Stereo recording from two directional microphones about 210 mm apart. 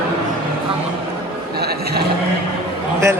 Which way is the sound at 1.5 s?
50° right (ahead or behind).